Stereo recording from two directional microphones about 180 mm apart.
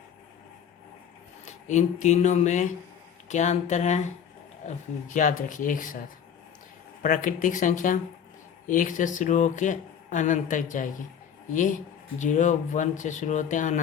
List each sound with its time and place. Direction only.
1.5 s speech: 40° left (ahead or behind)
7.0 s speech: 45° left (ahead or behind)
12.2 s speech: 45° left (ahead or behind)